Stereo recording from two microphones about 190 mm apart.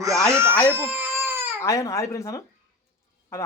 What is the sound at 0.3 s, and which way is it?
Speech, 15° right (ahead or behind).